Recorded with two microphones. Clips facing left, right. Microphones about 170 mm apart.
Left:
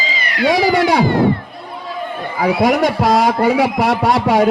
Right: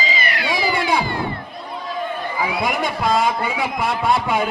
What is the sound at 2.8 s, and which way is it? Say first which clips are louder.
A man's voice: left 5 dB; 75° left (ahead or behind).